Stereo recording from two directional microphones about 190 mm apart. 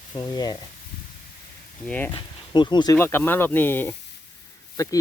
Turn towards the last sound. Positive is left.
turn(degrees=15)  # may be behind; listen again after turning